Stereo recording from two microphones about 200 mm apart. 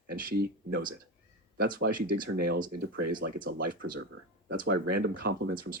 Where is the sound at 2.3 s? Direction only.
50° right (ahead or behind).